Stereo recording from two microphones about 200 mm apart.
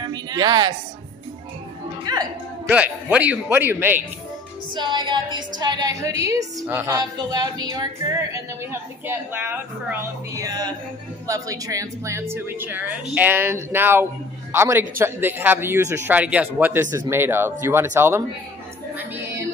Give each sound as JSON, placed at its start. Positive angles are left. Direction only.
{"t": 0.0, "sound": "a sound", "side_deg": -20}
{"t": 2.1, "sound": "a woman's voice", "side_deg": -20}
{"t": 2.7, "sound": "a woman's voice", "side_deg": -5}
{"t": 4.7, "sound": "a woman's voice", "side_deg": -25}